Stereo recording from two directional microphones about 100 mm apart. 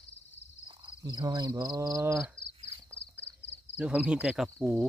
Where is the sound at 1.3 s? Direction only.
45° right (ahead or behind).